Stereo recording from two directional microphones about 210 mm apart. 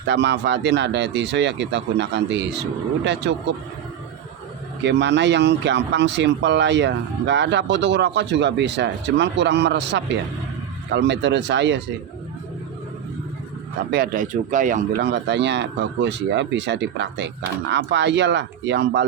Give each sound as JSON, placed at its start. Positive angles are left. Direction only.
{"t": 0.1, "sound": "speech", "side_deg": -55}
{"t": 4.8, "sound": "speech", "side_deg": -55}
{"t": 13.9, "sound": "speech", "side_deg": -45}
{"t": 15.0, "sound": "speech", "side_deg": -55}